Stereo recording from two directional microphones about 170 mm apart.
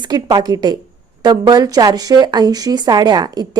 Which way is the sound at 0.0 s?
25° right (ahead or behind).